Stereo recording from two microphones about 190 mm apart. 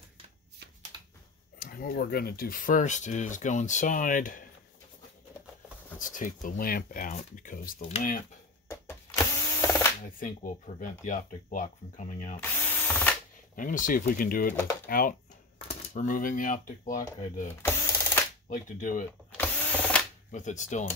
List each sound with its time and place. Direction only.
0.9 s a sound: 20° right (ahead or behind)
1.6 s speech: 50° left (ahead or behind)
5.9 s speech: 45° left (ahead or behind)
8.6 s power windows: 15° left (ahead or behind)
10.0 s speech: 45° left (ahead or behind)
12.8 s drill: 10° left (ahead or behind)
13.6 s speech: 45° left (ahead or behind)
14.5 s speech: 10° left (ahead or behind)
14.9 s speech: 50° left (ahead or behind)
17.6 s a sound: 15° left (ahead or behind)
18.5 s speech: 40° left (ahead or behind)
19.3 s drill: 10° left (ahead or behind)
20.2 s speech: 40° left (ahead or behind)